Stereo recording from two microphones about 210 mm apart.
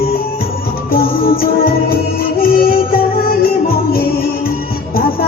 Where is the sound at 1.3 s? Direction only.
45° left (ahead or behind).